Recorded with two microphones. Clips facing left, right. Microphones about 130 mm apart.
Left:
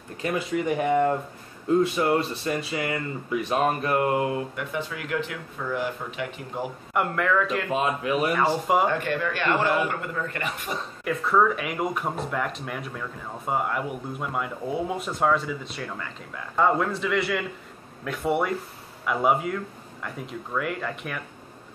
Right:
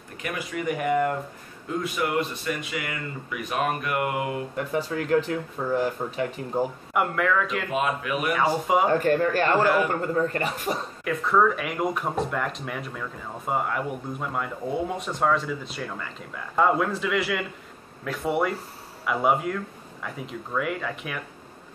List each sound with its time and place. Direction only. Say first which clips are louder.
0.2 s speech: left 4 dB; 25° left (ahead or behind)
4.6 s speech: right 4 dB; 35° right (ahead or behind)
6.9 s speech: left 2 dB; centre (ahead or behind)
7.7 s speech: left 1 dB; 30° left (ahead or behind)
8.4 s speech: right 4 dB; centre (ahead or behind)
8.8 s speech: right 4 dB; 40° right (ahead or behind)
11.1 s speech: even; centre (ahead or behind)